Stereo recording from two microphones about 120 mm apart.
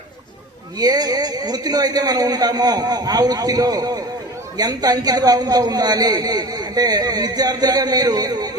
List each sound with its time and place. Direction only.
0.8 s a man's voice: 35° right (ahead or behind)